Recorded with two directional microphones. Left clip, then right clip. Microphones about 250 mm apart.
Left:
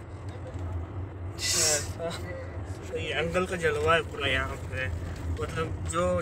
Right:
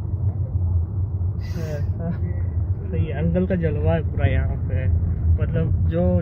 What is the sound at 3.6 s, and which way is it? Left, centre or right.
Speech, left.